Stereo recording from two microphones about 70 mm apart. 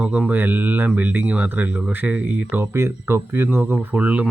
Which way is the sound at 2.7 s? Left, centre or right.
Right.